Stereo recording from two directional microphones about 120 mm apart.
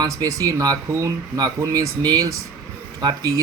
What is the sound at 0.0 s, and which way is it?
Speech, 30° right (ahead or behind).